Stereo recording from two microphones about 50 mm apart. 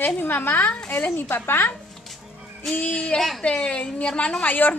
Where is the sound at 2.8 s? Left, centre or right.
Left.